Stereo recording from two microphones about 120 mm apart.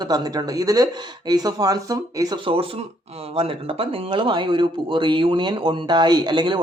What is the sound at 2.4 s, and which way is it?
Speech, 50° right (ahead or behind).